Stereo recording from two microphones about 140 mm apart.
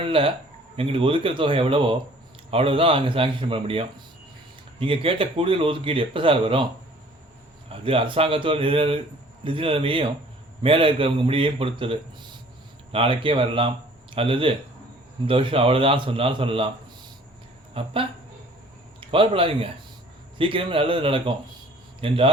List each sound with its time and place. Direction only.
0.0 s speech: 40° right (ahead or behind)
7.7 s speech: 40° right (ahead or behind)
17.7 s speech: 45° right (ahead or behind)
18.9 s speech: 40° right (ahead or behind)